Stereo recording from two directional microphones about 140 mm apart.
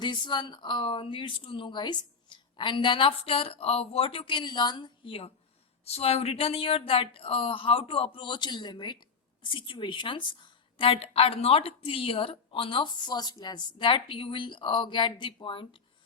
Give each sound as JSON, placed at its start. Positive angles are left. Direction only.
{"t": 0.0, "sound": "speech", "side_deg": 35}